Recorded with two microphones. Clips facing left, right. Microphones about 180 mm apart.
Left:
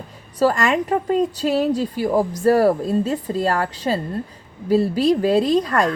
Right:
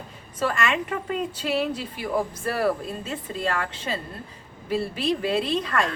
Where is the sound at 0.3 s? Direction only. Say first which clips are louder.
Left 7 dB; 35° left (ahead or behind).